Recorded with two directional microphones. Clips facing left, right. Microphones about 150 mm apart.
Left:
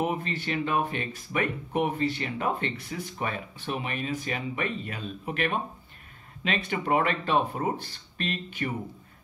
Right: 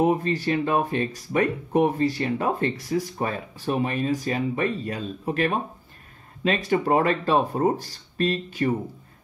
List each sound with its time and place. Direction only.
0.0 s speech: 35° right (ahead or behind)